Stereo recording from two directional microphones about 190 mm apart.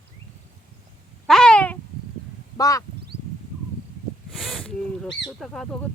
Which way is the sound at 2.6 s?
20° left (ahead or behind).